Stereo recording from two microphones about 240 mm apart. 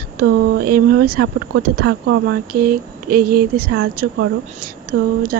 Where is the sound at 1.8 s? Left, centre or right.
Right.